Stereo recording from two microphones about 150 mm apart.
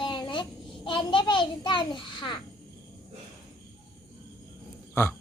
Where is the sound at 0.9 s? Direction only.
35° left (ahead or behind).